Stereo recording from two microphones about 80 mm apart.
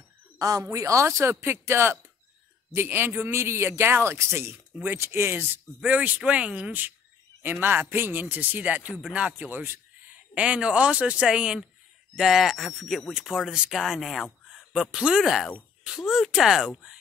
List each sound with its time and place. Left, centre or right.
0.4 s a woman's voice: right; by 17.0 s centre